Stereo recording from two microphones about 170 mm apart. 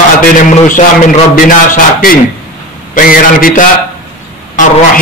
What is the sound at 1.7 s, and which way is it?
A man's voice, 55° left (ahead or behind).